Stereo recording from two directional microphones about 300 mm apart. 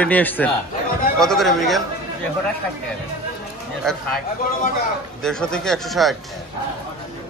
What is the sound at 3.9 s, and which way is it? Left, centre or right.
Speech, centre.